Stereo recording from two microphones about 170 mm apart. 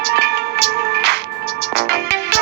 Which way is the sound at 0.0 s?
75° right (ahead or behind).